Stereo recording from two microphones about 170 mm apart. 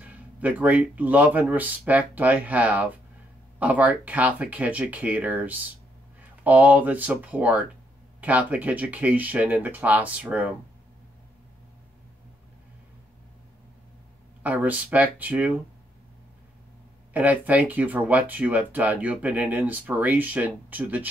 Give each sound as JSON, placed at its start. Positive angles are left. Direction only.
{"t": 0.0, "sound": "speech", "side_deg": -10}
{"t": 14.4, "sound": "speech", "side_deg": -10}
{"t": 17.1, "sound": "speech", "side_deg": -10}